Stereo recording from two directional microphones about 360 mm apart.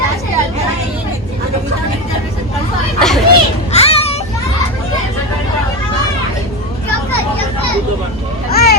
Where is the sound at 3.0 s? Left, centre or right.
Centre.